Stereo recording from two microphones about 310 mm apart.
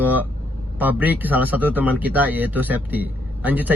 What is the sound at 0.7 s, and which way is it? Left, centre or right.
A man's voice, centre.